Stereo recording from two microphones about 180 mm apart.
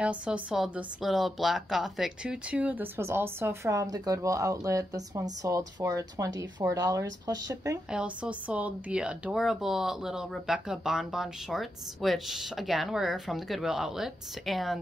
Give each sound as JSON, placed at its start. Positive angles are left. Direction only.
{"t": 0.0, "sound": "speech", "side_deg": -5}
{"t": 7.9, "sound": "speech", "side_deg": -5}